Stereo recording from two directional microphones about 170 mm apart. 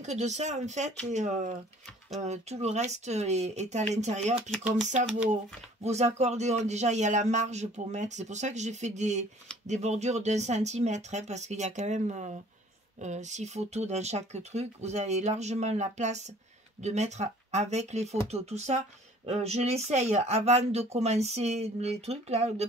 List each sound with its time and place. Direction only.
0.0 s speech: 40° right (ahead or behind)
4.4 s speech: centre (ahead or behind)
5.3 s speech: 40° right (ahead or behind)